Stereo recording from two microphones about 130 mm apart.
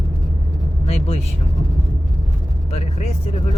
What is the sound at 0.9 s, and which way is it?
Speech, 50° left (ahead or behind).